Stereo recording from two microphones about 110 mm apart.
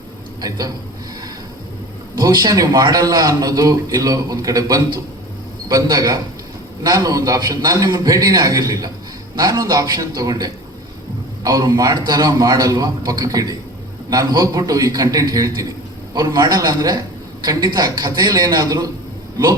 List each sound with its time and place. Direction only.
0.4 s a man's voice: 35° right (ahead or behind)
2.1 s a man's voice: 35° right (ahead or behind)